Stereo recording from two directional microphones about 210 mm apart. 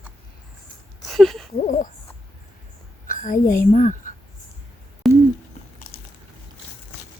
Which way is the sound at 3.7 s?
35° left (ahead or behind).